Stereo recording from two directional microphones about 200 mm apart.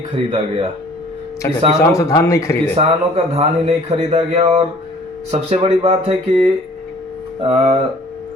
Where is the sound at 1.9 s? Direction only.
15° left (ahead or behind).